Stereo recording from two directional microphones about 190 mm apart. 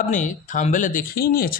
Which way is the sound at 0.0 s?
40° left (ahead or behind).